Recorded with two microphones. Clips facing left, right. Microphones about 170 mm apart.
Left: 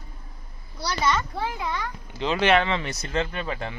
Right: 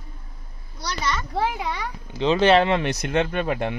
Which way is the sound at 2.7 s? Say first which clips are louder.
Right 6 dB; 60° right (ahead or behind).